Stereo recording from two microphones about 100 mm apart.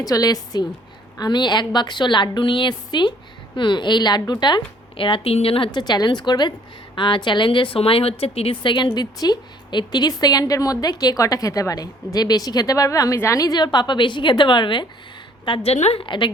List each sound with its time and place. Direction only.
0.0 s a woman's voice: 40° left (ahead or behind); by 5.7 s 65° left (ahead or behind)
5.7 s a woman's voice: 45° left (ahead or behind); by 8.5 s 75° left (ahead or behind)
8.6 s a woman's voice: 50° left (ahead or behind)
15.4 s a woman's voice: 70° left (ahead or behind); by 16.0 s 85° left
16.0 s a woman's voice: 50° left (ahead or behind)